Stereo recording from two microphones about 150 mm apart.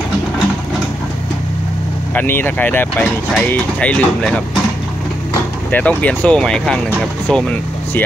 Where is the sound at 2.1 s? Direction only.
15° left (ahead or behind).